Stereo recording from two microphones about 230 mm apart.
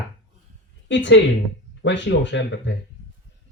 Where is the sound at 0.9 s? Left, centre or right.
Left.